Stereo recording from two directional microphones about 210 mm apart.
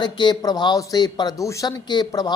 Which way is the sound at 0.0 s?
20° left (ahead or behind).